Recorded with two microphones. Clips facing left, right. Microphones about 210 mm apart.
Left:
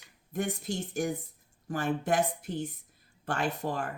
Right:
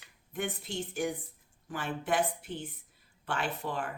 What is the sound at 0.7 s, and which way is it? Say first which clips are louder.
A woman's voice: left 2 dB; 40° left (ahead or behind).